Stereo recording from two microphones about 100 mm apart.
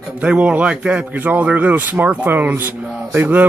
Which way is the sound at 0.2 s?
10° right (ahead or behind).